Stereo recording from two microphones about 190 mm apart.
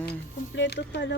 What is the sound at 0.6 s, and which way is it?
Speech, 65° left (ahead or behind).